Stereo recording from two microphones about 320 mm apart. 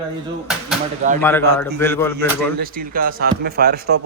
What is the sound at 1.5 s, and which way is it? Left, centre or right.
Speech, centre.